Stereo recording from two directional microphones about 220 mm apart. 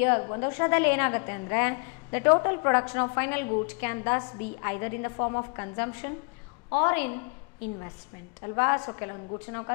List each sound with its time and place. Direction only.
0.0 s a woman's voice: 15° left (ahead or behind)
8.4 s a woman's voice: 15° left (ahead or behind)